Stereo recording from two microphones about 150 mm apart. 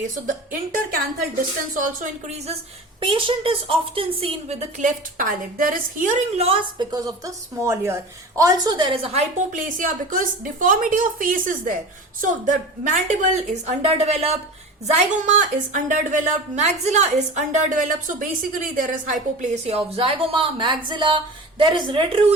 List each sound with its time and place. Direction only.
1.7 s a woman's voice: 60° right (ahead or behind)
3.0 s speech: 35° right (ahead or behind)
6.9 s speech: 25° right (ahead or behind); by 9.2 s 40° right (ahead or behind)
9.5 s a woman's voice: 60° right (ahead or behind); by 22.4 s 35° right (ahead or behind)